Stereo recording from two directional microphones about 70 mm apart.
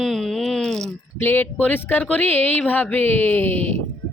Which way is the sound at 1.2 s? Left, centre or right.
Left.